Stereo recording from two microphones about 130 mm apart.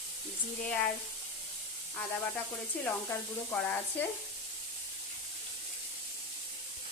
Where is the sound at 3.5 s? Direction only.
10° left (ahead or behind).